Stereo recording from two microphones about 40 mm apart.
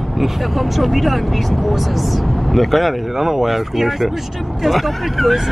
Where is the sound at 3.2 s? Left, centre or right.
Centre.